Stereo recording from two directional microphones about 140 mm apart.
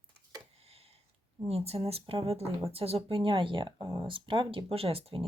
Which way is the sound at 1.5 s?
45° right (ahead or behind).